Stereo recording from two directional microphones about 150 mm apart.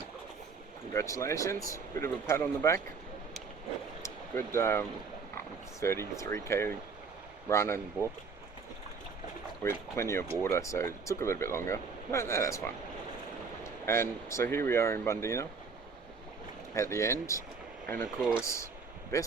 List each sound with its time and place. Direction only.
0.9 s speech: 20° left (ahead or behind)
4.0 s speech: 15° left (ahead or behind)
9.6 s speech: 15° left (ahead or behind)
16.7 s speech: 20° left (ahead or behind)
18.2 s speech: centre (ahead or behind)
18.4 s speech: 20° left (ahead or behind)